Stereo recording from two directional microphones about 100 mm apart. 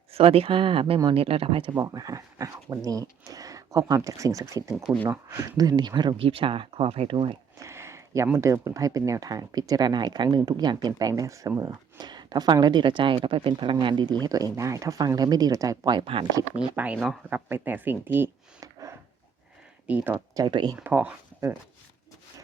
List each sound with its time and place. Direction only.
0.1 s speech: 75° right (ahead or behind)
1.7 s speech: 35° right (ahead or behind)
4.9 s speech: 5° right (ahead or behind)
5.3 s speech: 40° right (ahead or behind)
6.2 s speech: 65° right (ahead or behind)
7.6 s a sound: 25° right (ahead or behind)
8.4 s speech: 30° right (ahead or behind)
16.0 s speech: 65° right (ahead or behind)
16.7 s speech: 15° right (ahead or behind)
18.6 s a sound: 35° right (ahead or behind)
20.3 s speech: 45° right (ahead or behind)
20.8 s speech: 15° right (ahead or behind)